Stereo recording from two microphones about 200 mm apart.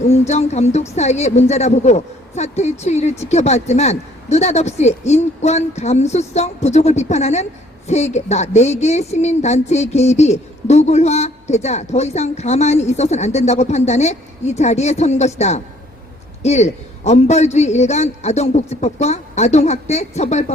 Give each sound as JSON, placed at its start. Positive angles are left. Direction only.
{"t": 0.1, "sound": "a woman's voice", "side_deg": 35}